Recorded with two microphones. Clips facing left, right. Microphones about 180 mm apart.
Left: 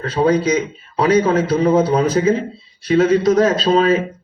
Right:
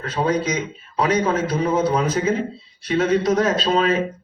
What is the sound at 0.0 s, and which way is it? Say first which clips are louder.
Speech: left 6 dB; 30° left (ahead or behind).